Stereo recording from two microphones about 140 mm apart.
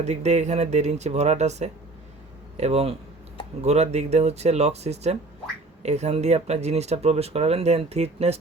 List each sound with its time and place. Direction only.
0.0 s speech: 55° right (ahead or behind)